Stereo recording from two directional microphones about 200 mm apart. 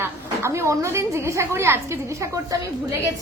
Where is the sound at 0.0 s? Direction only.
15° right (ahead or behind).